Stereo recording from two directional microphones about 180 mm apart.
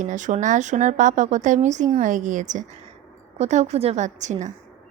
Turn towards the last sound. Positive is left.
turn(degrees=-40)  # may be behind; listen again after turning